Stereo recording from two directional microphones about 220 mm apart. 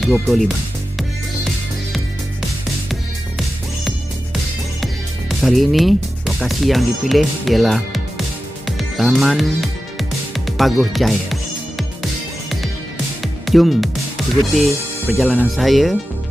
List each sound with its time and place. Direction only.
0.0 s speech: centre (ahead or behind)
5.4 s speech: centre (ahead or behind)
8.6 s music: centre (ahead or behind)
13.2 s music: centre (ahead or behind)
14.5 s speech: centre (ahead or behind)